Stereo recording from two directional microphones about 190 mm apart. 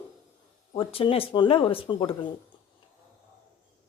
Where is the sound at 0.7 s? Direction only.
30° left (ahead or behind).